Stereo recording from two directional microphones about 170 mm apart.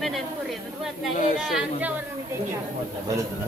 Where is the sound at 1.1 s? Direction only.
45° left (ahead or behind).